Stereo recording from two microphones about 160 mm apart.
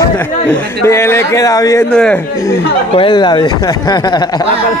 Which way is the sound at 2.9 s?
30° left (ahead or behind).